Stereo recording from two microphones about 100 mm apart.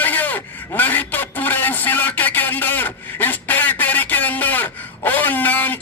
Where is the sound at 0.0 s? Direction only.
15° left (ahead or behind).